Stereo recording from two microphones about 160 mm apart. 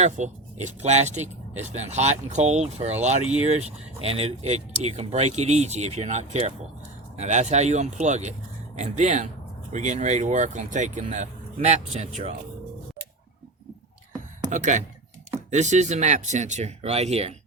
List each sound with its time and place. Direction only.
0.0 s speech: 45° right (ahead or behind)
14.5 s speech: 50° right (ahead or behind)